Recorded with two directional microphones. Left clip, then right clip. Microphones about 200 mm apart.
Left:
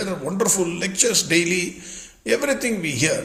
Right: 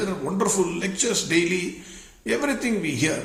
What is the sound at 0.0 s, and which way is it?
A man's voice, 40° left (ahead or behind).